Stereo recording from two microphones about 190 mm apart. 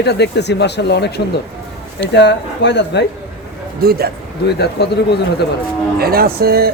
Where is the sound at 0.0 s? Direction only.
60° left (ahead or behind).